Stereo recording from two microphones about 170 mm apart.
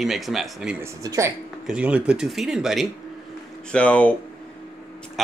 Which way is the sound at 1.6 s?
5° right (ahead or behind).